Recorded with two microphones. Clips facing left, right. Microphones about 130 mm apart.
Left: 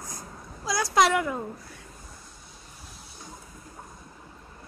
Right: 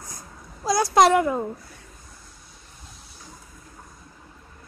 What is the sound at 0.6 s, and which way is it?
Speech, 45° right (ahead or behind).